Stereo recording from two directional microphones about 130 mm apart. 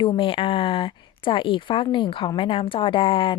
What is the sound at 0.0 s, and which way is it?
Speech, 40° left (ahead or behind).